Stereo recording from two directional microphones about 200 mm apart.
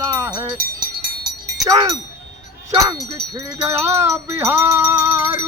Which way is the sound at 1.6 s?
15° right (ahead or behind).